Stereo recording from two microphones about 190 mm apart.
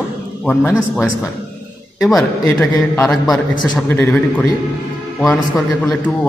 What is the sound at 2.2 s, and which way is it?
Speech, 10° left (ahead or behind).